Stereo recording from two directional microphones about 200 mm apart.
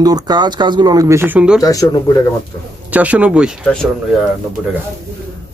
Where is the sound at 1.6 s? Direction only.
15° left (ahead or behind).